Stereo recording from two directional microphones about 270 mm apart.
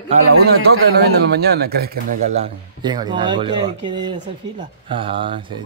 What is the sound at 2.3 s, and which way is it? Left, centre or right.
Speech, centre.